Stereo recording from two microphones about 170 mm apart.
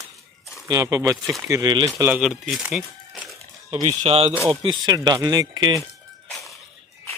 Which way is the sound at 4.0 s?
40° right (ahead or behind).